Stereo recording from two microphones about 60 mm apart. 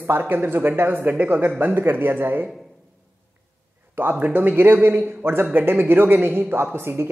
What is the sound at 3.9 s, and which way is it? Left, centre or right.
A man's voice, right.